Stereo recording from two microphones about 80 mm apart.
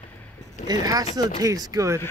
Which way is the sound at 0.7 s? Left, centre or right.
Right.